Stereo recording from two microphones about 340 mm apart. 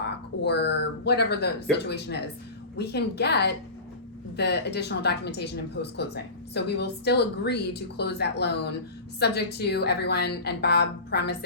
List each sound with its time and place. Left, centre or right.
0.4 s a woman's voice: left